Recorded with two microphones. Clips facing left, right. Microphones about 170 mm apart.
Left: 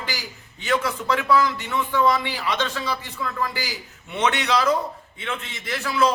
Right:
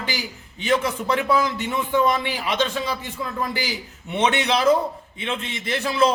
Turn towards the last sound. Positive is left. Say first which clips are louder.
# right 2 dB
turn(degrees=-25)  # may be behind; listen again after turning